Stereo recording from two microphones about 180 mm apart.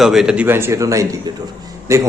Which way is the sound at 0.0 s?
Centre (ahead or behind).